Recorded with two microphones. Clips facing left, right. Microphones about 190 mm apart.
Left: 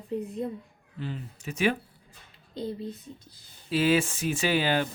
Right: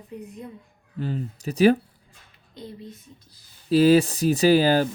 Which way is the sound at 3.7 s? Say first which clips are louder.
Right 8 dB; 40° right (ahead or behind).